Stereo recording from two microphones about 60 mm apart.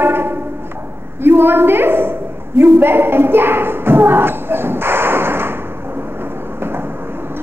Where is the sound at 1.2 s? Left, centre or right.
Right.